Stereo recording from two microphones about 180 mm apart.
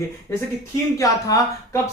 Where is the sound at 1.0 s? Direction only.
20° left (ahead or behind).